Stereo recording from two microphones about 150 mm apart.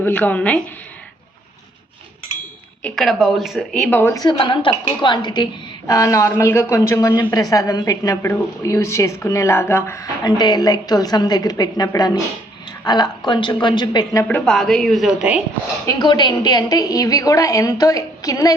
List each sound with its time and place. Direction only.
0.0 s a woman's voice: 10° left (ahead or behind)
2.8 s speech: centre (ahead or behind)
4.2 s a woman's voice: 30° left (ahead or behind)
14.3 s speech: 5° left (ahead or behind)
15.9 s a woman's voice: 30° left (ahead or behind)